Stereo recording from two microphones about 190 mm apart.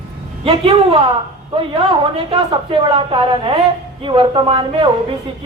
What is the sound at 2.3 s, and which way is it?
A man's voice, 25° right (ahead or behind).